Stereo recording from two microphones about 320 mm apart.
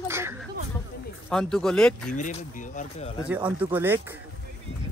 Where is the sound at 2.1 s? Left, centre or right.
Left.